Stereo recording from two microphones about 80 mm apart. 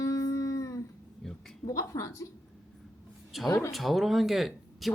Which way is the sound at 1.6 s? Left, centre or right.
Left.